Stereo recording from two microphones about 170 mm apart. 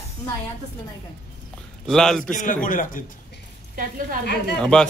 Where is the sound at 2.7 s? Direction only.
50° left (ahead or behind).